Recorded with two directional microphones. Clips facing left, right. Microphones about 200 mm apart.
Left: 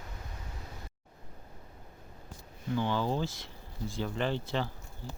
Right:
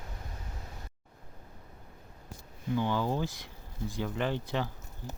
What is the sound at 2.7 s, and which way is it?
Speech, 15° right (ahead or behind).